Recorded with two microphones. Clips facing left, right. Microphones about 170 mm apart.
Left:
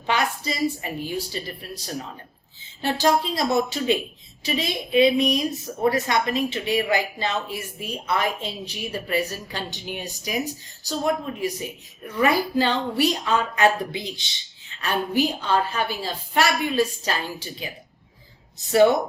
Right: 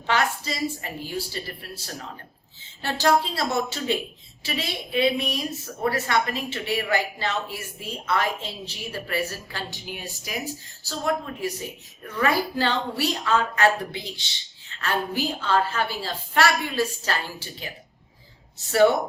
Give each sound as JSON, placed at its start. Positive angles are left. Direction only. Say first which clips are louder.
{"t": 0.1, "sound": "a woman's voice", "louder": "even", "side_deg": 15}